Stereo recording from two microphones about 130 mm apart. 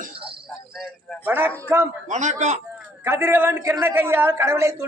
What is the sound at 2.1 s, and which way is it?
Speech, 65° right (ahead or behind).